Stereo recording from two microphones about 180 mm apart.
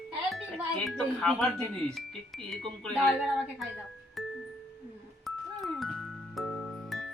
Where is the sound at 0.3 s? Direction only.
Centre (ahead or behind).